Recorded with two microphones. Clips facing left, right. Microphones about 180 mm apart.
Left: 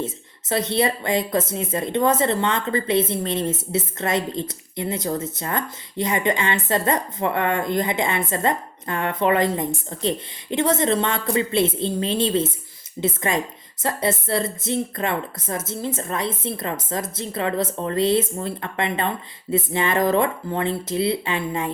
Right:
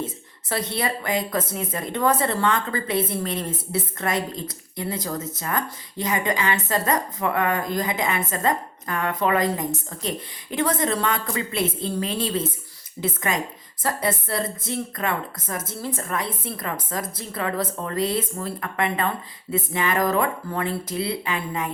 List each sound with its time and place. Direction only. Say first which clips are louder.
0.0 s a woman's voice: left 2 dB; 25° left (ahead or behind)